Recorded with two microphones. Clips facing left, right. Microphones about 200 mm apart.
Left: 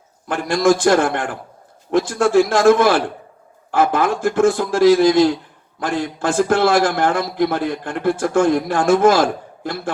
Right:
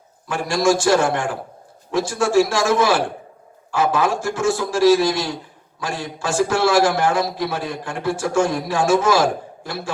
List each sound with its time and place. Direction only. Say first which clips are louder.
0.3 s a man's voice: left 3 dB; 55° left (ahead or behind)